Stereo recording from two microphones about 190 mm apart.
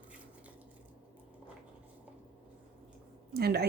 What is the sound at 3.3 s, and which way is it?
Speech, 55° right (ahead or behind).